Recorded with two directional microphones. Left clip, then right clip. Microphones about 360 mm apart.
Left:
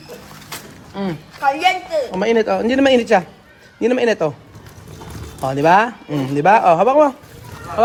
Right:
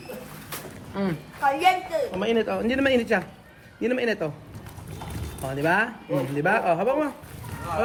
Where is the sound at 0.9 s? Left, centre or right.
Centre.